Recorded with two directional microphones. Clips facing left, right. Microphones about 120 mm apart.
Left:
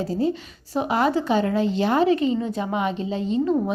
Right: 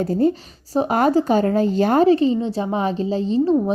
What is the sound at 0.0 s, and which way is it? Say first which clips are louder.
Speech: right 5 dB; 55° right (ahead or behind).